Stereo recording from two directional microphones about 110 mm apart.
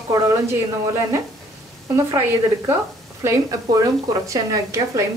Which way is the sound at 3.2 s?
30° right (ahead or behind).